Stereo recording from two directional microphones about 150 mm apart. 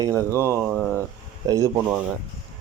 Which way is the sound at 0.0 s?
20° right (ahead or behind).